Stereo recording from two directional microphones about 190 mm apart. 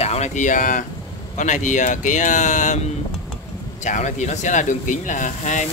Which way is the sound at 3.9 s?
40° left (ahead or behind).